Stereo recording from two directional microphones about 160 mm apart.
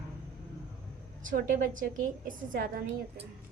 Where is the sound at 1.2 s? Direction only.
55° right (ahead or behind).